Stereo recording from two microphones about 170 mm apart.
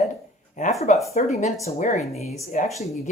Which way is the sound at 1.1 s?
40° left (ahead or behind).